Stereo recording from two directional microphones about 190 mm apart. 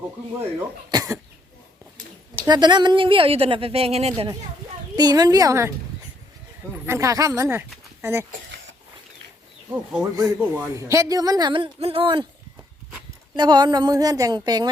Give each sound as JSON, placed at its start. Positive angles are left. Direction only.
{"t": 0.9, "sound": "speech", "side_deg": -20}
{"t": 2.4, "sound": "speech", "side_deg": -20}
{"t": 4.9, "sound": "speech", "side_deg": -20}
{"t": 6.8, "sound": "speech", "side_deg": -15}
{"t": 9.6, "sound": "speech", "side_deg": -10}
{"t": 13.3, "sound": "speech", "side_deg": -25}